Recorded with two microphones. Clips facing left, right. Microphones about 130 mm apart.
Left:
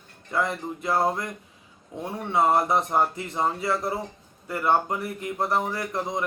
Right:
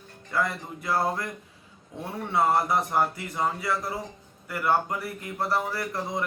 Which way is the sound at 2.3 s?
20° left (ahead or behind).